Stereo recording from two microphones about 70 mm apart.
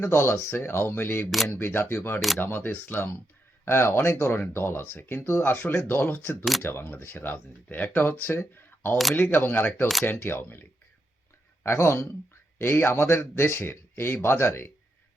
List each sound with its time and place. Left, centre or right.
0.0 s speech: left
1.3 s speech: centre
1.5 s speech: left